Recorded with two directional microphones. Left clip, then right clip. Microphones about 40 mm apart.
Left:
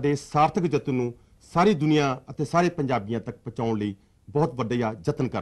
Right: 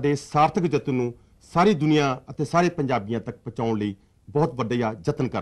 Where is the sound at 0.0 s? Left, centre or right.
Right.